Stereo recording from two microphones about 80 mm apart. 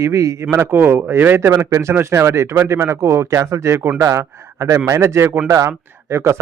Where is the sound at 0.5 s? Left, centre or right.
Right.